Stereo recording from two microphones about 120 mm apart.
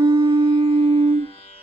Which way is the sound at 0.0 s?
45° right (ahead or behind).